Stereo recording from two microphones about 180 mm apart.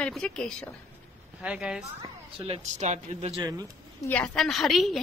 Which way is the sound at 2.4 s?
35° right (ahead or behind).